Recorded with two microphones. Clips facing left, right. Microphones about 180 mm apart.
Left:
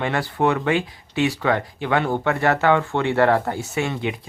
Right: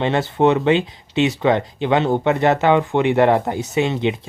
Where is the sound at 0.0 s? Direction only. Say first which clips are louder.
Right 5 dB; 25° right (ahead or behind).